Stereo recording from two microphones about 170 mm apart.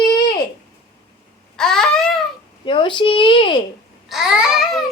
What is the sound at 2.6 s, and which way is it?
A child's voice, 30° left (ahead or behind).